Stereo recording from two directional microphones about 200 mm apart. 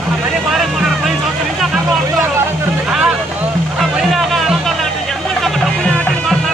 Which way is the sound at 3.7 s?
Centre (ahead or behind).